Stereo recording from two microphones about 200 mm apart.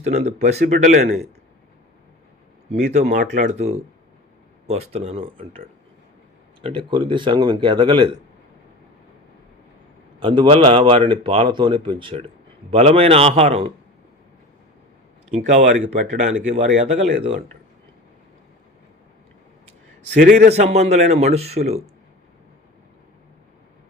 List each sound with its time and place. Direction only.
0.0 s speech: 35° right (ahead or behind)
2.8 s speech: 35° right (ahead or behind)
10.2 s speech: 25° right (ahead or behind)
15.3 s speech: 35° right (ahead or behind)
20.2 s a man's voice: 45° right (ahead or behind)
20.5 s speech: 35° right (ahead or behind)